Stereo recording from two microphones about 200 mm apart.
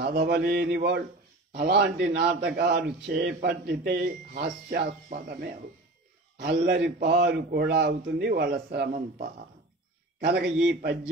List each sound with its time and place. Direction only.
0.0 s a man's voice: 55° right (ahead or behind)